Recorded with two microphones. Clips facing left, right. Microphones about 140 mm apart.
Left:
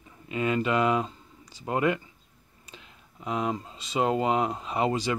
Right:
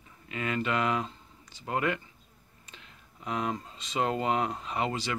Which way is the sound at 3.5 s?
15° left (ahead or behind).